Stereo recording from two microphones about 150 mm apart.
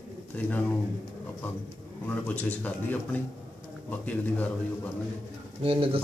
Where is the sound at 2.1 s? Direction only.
10° left (ahead or behind).